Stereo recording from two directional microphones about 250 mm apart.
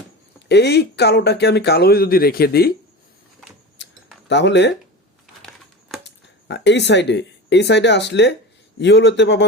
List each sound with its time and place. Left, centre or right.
0.4 s speech: left
3.8 s a sound: left
4.3 s a man's voice: left
6.1 s a man's voice: left